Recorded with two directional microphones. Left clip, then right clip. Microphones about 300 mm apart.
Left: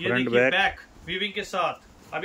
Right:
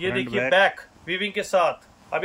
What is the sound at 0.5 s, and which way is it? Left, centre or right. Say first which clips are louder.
Speech: right 5 dB; centre.